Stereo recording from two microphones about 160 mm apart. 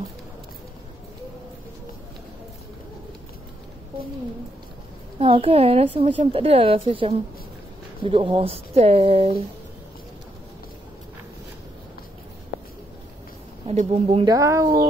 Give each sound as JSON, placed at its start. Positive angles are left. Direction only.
{"t": 5.2, "sound": "speech", "side_deg": -35}
{"t": 13.7, "sound": "speech", "side_deg": -40}
{"t": 14.2, "sound": "speech", "side_deg": -20}